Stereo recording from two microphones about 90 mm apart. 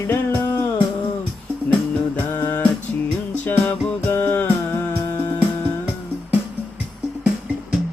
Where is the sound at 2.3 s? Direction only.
20° left (ahead or behind).